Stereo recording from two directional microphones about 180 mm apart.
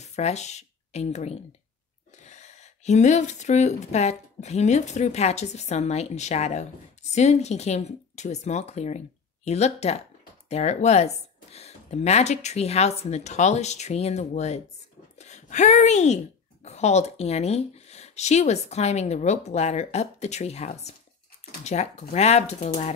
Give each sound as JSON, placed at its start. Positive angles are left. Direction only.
{"t": 0.0, "sound": "a woman's voice", "side_deg": 40}